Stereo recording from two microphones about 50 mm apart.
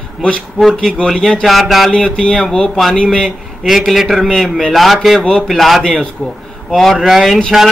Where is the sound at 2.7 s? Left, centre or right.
Centre.